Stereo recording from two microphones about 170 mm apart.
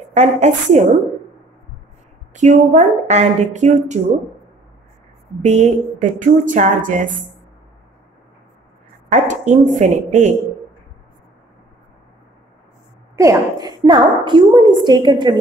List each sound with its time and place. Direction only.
0.1 s a woman's voice: 45° right (ahead or behind)
2.3 s a woman's voice: 45° right (ahead or behind)
5.4 s a woman's voice: 45° right (ahead or behind)
9.1 s a woman's voice: 45° right (ahead or behind)
13.1 s a woman's voice: 20° right (ahead or behind)